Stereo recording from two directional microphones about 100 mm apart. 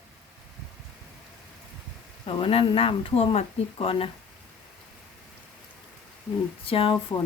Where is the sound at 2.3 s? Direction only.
65° left (ahead or behind).